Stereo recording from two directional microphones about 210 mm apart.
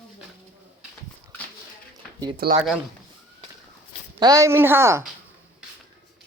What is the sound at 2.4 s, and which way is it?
Speech, 45° right (ahead or behind).